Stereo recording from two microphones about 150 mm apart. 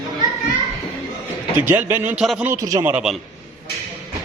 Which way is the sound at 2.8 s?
10° right (ahead or behind).